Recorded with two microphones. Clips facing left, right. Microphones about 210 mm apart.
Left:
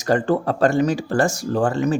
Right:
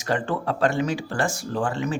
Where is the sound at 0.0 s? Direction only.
40° left (ahead or behind).